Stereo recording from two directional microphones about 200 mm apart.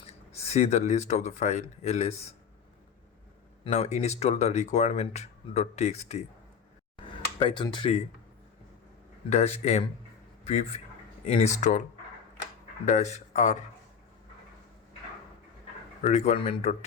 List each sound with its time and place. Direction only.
0.5 s speech: 35° left (ahead or behind)
3.6 s speech: 35° left (ahead or behind)
6.9 s a sound: 25° left (ahead or behind)
9.3 s speech: 35° left (ahead or behind)
16.0 s speech: 35° left (ahead or behind)